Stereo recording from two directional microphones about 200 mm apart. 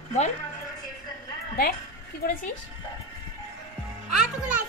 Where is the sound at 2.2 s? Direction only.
50° left (ahead or behind).